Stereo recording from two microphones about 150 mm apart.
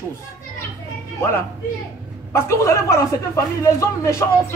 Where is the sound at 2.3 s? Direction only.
20° left (ahead or behind).